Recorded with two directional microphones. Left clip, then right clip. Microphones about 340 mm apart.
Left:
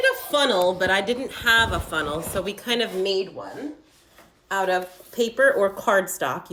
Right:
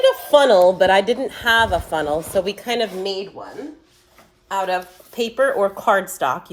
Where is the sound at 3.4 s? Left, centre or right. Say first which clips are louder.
Right 1 dB; centre.